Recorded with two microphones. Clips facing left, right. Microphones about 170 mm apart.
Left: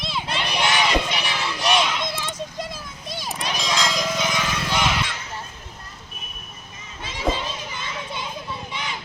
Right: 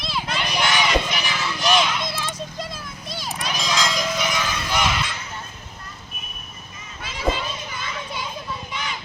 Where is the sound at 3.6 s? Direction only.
Centre (ahead or behind).